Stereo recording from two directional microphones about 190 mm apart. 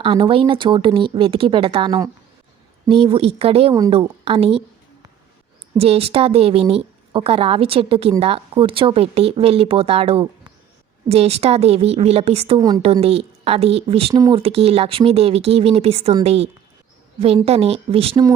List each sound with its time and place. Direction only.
0.0 s a woman's voice: 25° right (ahead or behind)
3.8 s speech: 20° right (ahead or behind)
5.7 s a woman's voice: 30° right (ahead or behind)
12.8 s a woman's voice: 30° right (ahead or behind)